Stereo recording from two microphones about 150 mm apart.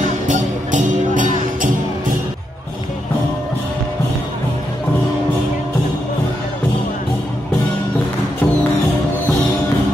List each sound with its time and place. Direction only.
0.3 s music: 55° right (ahead or behind)